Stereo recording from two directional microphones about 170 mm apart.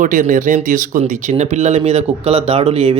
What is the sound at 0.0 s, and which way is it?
Speech, 50° right (ahead or behind).